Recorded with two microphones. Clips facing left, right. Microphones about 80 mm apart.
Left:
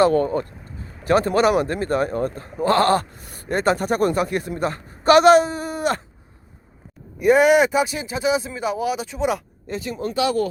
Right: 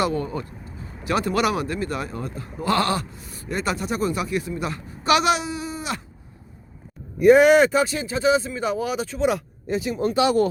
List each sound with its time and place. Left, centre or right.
0.1 s a man's voice: left
7.2 s speech: centre
9.6 s speech: centre
10.2 s speech: right